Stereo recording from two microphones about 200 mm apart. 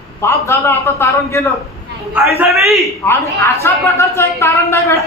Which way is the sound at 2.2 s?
10° right (ahead or behind).